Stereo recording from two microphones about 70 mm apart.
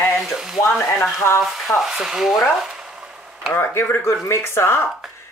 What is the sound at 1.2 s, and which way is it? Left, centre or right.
Speech, left.